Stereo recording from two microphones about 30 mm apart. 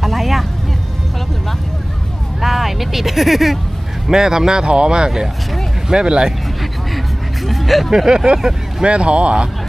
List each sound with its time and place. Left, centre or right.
0.0 s music: centre
2.4 s speech: centre
4.1 s speech: centre
7.4 s speech: centre
8.1 s speech: right
8.4 s speech: centre
8.8 s speech: right